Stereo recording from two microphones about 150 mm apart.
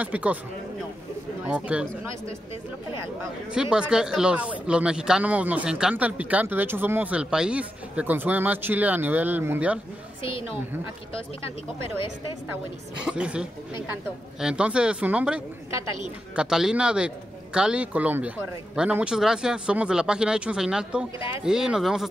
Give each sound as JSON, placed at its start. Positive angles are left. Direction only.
{"t": 0.0, "sound": "speech", "side_deg": -10}
{"t": 1.5, "sound": "speech", "side_deg": -5}
{"t": 3.5, "sound": "speech", "side_deg": -5}
{"t": 11.8, "sound": "speech", "side_deg": 35}
{"t": 13.0, "sound": "speech", "side_deg": -5}